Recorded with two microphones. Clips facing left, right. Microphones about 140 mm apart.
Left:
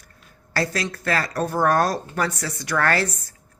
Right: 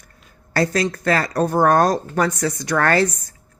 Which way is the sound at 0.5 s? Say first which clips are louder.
Right 6 dB; 45° right (ahead or behind).